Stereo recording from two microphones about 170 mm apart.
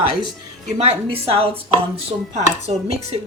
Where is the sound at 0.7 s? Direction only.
35° right (ahead or behind).